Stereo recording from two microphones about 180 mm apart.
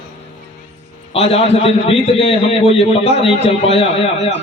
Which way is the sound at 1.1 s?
35° left (ahead or behind).